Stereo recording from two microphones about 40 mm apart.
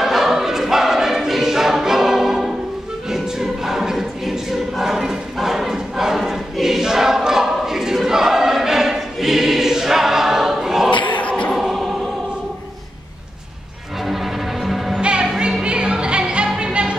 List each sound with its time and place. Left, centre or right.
0.0 s choir: centre
10.9 s a sound: left
11.5 s music: centre
14.0 s music: centre
14.9 s music: right